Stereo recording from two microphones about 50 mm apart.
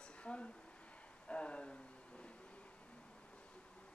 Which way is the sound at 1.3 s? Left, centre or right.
Left.